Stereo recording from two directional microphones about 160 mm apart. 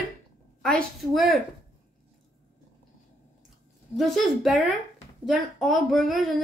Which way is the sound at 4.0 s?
Centre (ahead or behind).